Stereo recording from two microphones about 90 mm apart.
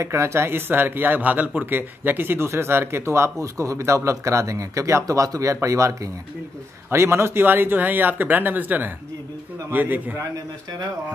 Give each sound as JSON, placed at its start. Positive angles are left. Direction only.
{"t": 0.0, "sound": "speech", "side_deg": -30}